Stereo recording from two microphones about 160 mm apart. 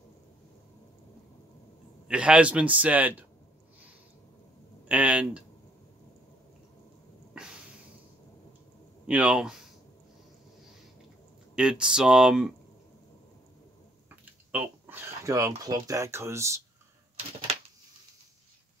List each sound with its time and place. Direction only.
2.0 s a man's voice: 5° right (ahead or behind)
4.8 s speech: 10° right (ahead or behind)
7.3 s snort: 5° right (ahead or behind)
9.0 s speech: 10° right (ahead or behind)
11.5 s speech: 5° right (ahead or behind)
14.5 s speech: 10° right (ahead or behind)